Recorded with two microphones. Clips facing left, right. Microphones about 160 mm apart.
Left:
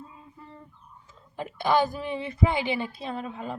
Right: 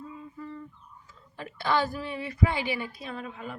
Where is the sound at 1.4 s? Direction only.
20° left (ahead or behind).